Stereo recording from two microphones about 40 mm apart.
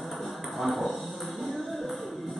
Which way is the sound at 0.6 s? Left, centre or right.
Centre.